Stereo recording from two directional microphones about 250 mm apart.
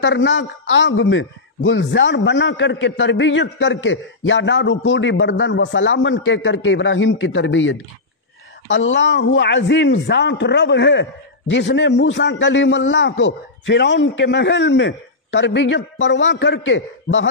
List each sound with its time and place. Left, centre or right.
0.0 s a man's voice: left